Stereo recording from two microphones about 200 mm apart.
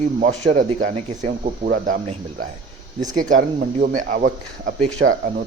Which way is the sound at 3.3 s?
40° right (ahead or behind).